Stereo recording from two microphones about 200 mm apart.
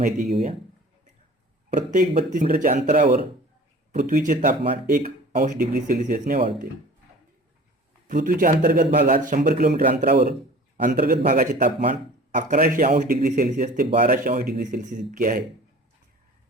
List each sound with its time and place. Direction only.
0.0 s speech: 35° right (ahead or behind)
1.9 s speech: 40° right (ahead or behind)
4.9 s speech: 45° right (ahead or behind)
8.0 s speech: 45° right (ahead or behind)